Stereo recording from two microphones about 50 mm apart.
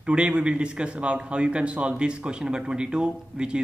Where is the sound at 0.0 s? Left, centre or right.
Centre.